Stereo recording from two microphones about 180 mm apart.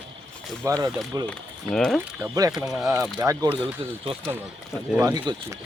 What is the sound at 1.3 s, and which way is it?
Speech, 5° left (ahead or behind).